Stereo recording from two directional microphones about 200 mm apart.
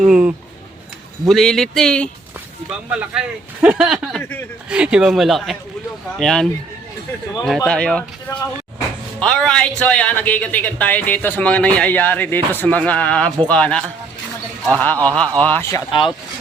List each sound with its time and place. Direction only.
0.0 s speech: 5° right (ahead or behind)
4.2 s a man's voice: 10° left (ahead or behind)
4.7 s a man's voice: 5° right (ahead or behind)
15.9 s speech: 25° left (ahead or behind)